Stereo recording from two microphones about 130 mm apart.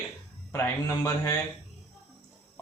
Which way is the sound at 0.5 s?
20° left (ahead or behind).